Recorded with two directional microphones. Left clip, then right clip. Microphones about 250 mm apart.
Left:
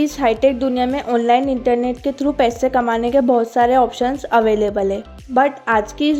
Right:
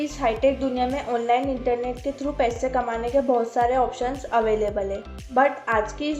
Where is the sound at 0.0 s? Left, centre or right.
Left.